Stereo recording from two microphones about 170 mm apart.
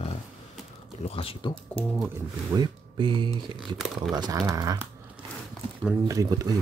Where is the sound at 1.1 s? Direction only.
35° left (ahead or behind).